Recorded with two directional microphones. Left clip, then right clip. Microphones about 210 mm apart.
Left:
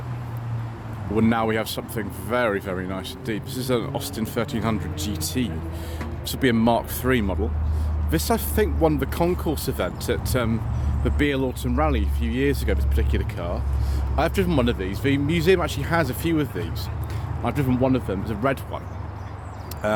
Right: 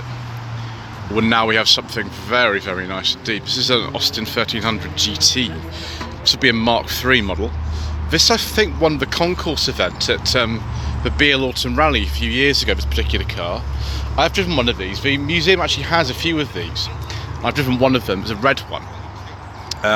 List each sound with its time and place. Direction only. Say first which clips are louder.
1.1 s speech: right 7 dB; 10° left (ahead or behind)
17.4 s speech: right 7 dB; 5° left (ahead or behind)
18.4 s speech: right 8 dB; 5° left (ahead or behind)